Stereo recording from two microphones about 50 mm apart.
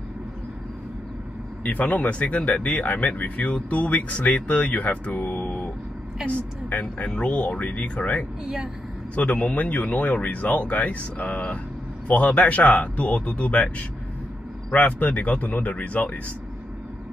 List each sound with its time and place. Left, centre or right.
1.6 s speech: left